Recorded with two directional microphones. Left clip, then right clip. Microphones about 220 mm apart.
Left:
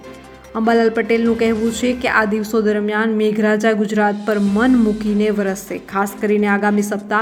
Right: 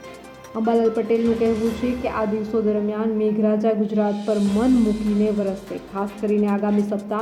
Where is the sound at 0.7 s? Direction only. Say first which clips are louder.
Left 4 dB; 15° left (ahead or behind).